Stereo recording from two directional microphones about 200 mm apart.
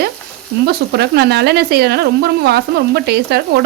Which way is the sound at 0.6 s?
55° right (ahead or behind).